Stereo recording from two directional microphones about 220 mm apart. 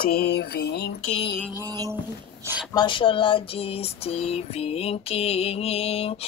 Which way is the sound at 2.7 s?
20° left (ahead or behind).